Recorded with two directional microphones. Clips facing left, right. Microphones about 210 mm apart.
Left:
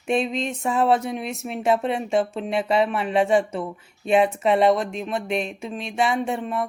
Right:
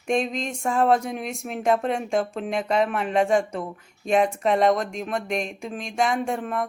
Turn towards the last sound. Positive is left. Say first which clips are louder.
# left 1 dB
turn(degrees=5)  # may be behind; listen again after turning